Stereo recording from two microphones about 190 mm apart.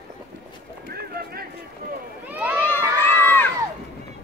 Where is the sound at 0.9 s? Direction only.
55° right (ahead or behind).